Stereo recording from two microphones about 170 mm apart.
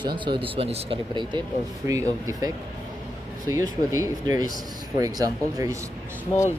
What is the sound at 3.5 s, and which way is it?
Speech, 20° right (ahead or behind).